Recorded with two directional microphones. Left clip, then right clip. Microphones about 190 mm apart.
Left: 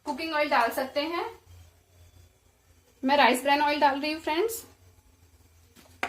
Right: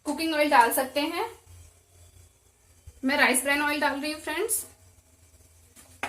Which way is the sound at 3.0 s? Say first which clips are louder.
Left 2 dB; 20° left (ahead or behind).